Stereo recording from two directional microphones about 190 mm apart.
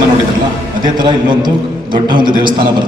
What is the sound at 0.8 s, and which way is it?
A man's voice, 25° right (ahead or behind).